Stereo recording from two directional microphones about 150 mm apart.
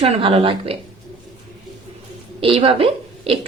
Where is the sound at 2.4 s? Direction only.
35° right (ahead or behind).